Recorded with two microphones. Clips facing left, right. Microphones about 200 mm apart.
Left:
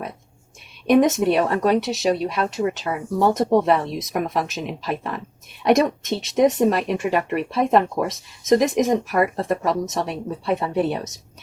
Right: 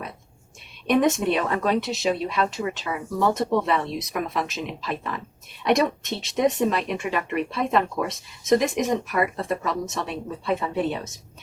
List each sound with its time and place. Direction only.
0.9 s speech: 45° left (ahead or behind)